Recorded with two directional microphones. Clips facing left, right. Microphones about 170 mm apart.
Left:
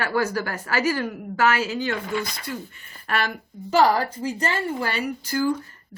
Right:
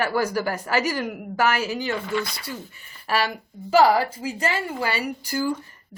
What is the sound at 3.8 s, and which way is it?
A woman's voice, 5° right (ahead or behind).